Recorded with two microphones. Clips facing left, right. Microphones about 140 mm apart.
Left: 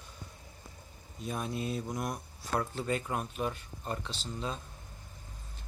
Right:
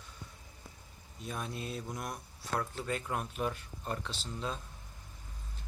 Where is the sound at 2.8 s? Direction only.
5° left (ahead or behind).